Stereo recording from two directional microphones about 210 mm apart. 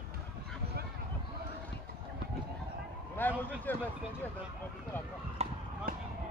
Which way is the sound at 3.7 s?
10° left (ahead or behind).